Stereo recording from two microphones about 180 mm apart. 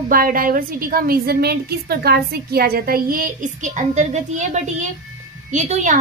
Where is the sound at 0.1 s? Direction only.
55° right (ahead or behind).